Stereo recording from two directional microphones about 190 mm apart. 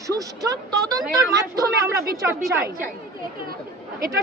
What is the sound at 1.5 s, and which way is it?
Speech, 15° right (ahead or behind).